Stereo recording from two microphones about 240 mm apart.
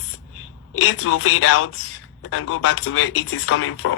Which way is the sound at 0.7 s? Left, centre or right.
Left.